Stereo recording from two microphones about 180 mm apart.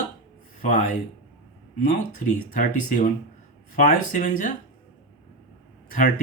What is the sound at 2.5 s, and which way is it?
Speech, 50° left (ahead or behind).